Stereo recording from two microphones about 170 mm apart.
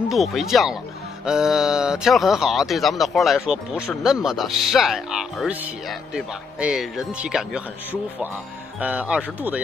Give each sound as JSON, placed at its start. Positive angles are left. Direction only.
{"t": 0.1, "sound": "speech", "side_deg": 0}